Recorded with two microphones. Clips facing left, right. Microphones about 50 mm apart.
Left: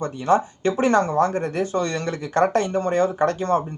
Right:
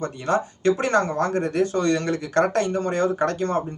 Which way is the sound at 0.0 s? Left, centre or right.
Left.